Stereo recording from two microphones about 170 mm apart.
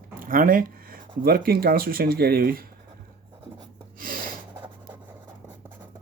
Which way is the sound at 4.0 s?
55° right (ahead or behind).